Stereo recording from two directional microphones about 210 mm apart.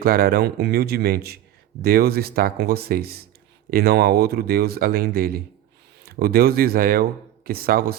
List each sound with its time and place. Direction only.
0.0 s speech: 45° right (ahead or behind)